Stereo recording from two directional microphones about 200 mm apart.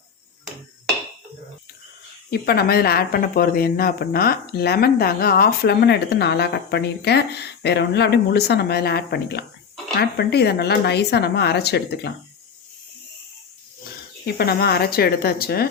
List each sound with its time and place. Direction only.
2.3 s speech: 50° left (ahead or behind)
14.3 s speech: 50° left (ahead or behind)